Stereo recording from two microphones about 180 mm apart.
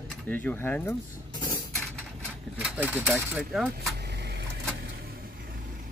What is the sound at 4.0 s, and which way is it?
Vehicle, 65° right (ahead or behind).